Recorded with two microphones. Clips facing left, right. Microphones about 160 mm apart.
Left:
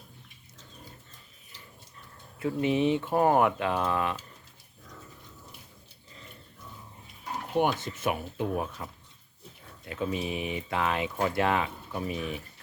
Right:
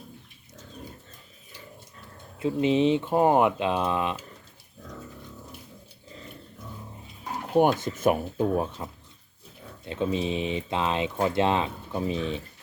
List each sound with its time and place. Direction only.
2.4 s speech: 20° right (ahead or behind)
7.5 s speech: 45° right (ahead or behind); by 12.4 s 25° right (ahead or behind)